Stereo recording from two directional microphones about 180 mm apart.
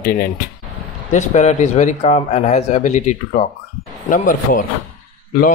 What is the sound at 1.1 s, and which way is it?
A man's voice, 40° left (ahead or behind).